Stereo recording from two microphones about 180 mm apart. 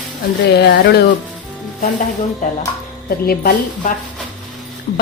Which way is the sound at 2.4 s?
45° left (ahead or behind).